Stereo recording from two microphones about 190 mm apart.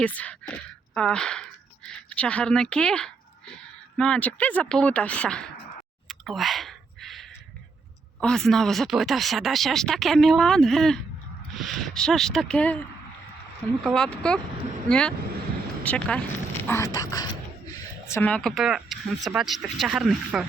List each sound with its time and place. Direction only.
0.0 s speech: 5° left (ahead or behind)
6.1 s clicking: centre (ahead or behind)
8.2 s speech: centre (ahead or behind)
13.8 s a woman's voice: 5° left (ahead or behind); by 17.2 s 20° left (ahead or behind)
18.1 s speech: 10° left (ahead or behind)